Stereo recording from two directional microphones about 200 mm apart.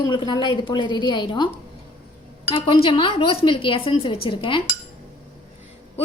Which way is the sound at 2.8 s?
25° left (ahead or behind).